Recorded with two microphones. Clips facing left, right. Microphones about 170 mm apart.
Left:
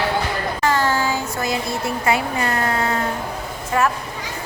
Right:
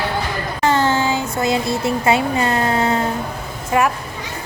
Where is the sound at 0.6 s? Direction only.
25° right (ahead or behind).